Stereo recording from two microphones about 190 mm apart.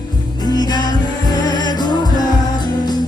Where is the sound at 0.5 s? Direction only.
20° left (ahead or behind).